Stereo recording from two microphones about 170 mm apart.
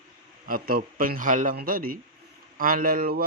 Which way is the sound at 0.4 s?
55° right (ahead or behind).